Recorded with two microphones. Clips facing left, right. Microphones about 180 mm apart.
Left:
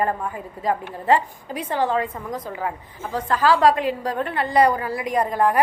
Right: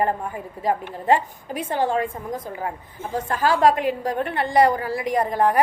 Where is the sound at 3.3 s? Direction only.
50° right (ahead or behind).